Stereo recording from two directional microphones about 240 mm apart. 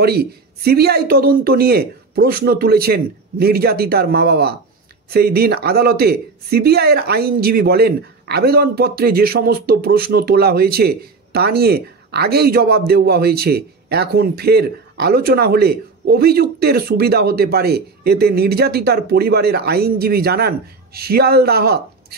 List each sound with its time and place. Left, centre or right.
0.0 s speech: right